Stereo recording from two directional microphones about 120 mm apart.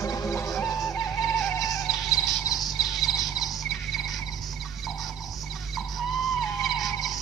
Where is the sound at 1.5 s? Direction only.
30° left (ahead or behind).